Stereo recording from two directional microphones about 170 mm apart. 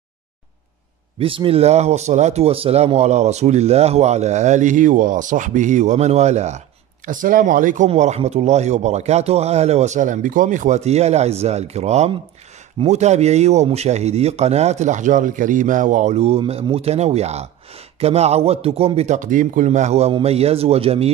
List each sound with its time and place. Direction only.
1.2 s speech: 30° right (ahead or behind)
7.1 s speech: 55° right (ahead or behind); by 21.1 s 35° right (ahead or behind)